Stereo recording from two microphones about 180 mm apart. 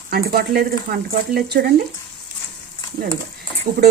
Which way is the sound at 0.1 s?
55° right (ahead or behind).